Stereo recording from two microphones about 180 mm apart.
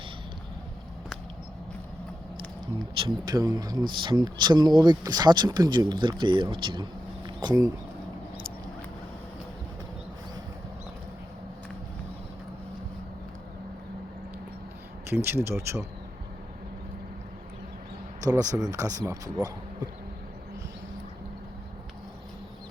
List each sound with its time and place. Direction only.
2.7 s speech: 25° right (ahead or behind)
15.1 s speech: 10° right (ahead or behind)
18.3 s speech: 20° right (ahead or behind)